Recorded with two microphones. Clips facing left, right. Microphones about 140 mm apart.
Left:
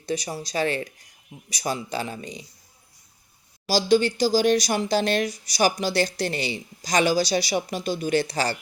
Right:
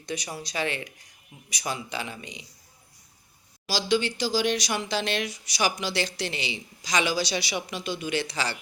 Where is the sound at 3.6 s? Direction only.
40° left (ahead or behind).